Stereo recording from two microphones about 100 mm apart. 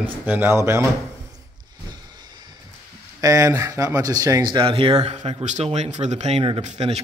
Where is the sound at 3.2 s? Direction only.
35° right (ahead or behind).